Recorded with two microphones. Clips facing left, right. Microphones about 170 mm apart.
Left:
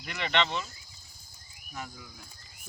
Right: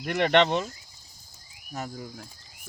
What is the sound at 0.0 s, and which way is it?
Speech, 55° right (ahead or behind).